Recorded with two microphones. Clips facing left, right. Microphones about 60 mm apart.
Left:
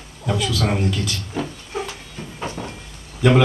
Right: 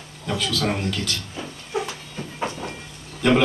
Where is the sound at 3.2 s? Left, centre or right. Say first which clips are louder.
Left 2 dB; centre.